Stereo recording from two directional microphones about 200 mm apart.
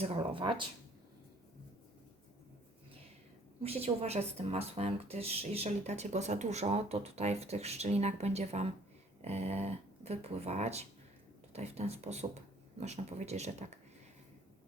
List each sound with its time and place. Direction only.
0.0 s speech: 25° right (ahead or behind)
3.6 s speech: 30° right (ahead or behind)